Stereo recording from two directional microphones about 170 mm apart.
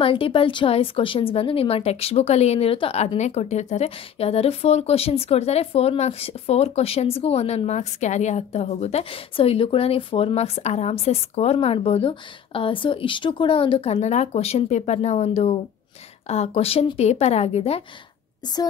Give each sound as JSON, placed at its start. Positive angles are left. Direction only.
{"t": 0.0, "sound": "speech", "side_deg": 30}